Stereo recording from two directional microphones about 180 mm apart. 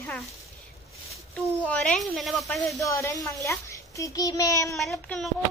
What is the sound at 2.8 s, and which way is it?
A child's voice, 20° left (ahead or behind).